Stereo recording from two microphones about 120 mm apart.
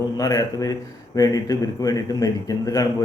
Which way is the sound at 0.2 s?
30° left (ahead or behind).